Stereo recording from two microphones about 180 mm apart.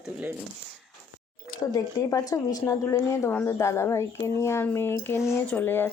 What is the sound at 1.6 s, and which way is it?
A woman's voice, 20° left (ahead or behind).